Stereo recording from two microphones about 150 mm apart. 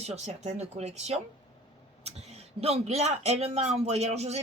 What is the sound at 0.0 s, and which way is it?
Speech, 50° right (ahead or behind).